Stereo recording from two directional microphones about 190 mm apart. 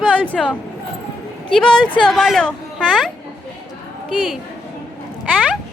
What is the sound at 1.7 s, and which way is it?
Speech, 25° left (ahead or behind).